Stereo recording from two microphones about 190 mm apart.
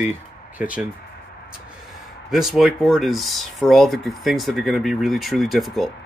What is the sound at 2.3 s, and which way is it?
Speech, centre (ahead or behind).